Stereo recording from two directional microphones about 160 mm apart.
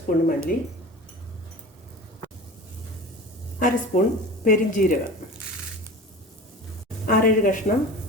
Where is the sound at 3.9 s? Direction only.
55° left (ahead or behind).